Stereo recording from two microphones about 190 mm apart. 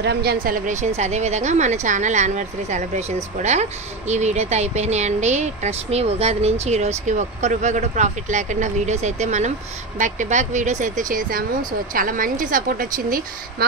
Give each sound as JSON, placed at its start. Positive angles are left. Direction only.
{"t": 0.0, "sound": "a woman's voice", "side_deg": -60}